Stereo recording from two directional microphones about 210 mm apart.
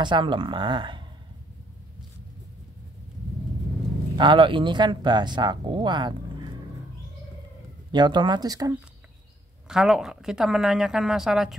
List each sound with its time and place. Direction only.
0.0 s speech: 20° right (ahead or behind)
4.2 s speech: 25° right (ahead or behind)
7.9 s speech: 20° right (ahead or behind)
9.7 s a woman's voice: centre (ahead or behind)